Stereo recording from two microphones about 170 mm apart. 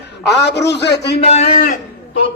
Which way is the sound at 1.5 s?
60° left (ahead or behind).